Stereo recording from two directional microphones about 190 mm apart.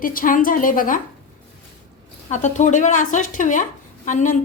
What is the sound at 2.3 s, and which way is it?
A woman's voice, 40° left (ahead or behind).